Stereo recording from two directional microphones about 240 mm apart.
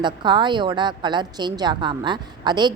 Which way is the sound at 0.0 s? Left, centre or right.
Centre.